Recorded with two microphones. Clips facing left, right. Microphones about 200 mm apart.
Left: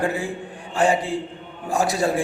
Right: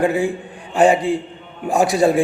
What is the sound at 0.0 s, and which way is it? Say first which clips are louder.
A man's voice: right 6 dB; 15° right (ahead or behind).